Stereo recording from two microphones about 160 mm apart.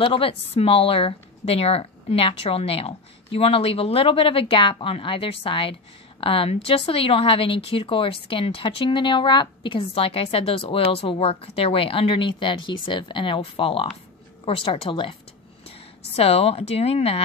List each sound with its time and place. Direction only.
0.0 s speech: 35° left (ahead or behind)
16.2 s speech: 40° left (ahead or behind)